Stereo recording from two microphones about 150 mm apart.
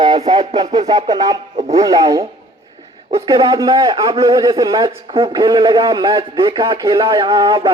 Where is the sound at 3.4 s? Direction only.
20° right (ahead or behind).